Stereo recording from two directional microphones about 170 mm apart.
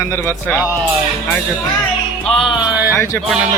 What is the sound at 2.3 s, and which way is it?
Music, 25° left (ahead or behind).